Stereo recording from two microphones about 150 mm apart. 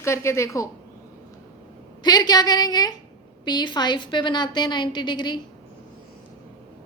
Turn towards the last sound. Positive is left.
turn(degrees=30)  # may be behind; listen again after turning